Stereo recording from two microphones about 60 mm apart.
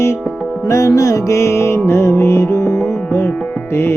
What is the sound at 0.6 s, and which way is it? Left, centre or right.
Music, left.